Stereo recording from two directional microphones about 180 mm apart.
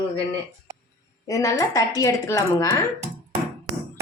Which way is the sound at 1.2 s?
15° left (ahead or behind).